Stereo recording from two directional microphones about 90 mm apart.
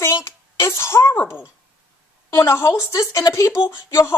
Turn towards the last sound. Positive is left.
turn(degrees=40)  # may be behind; listen again after turning